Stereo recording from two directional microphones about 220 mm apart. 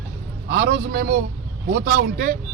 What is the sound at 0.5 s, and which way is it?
A man's voice, 45° right (ahead or behind).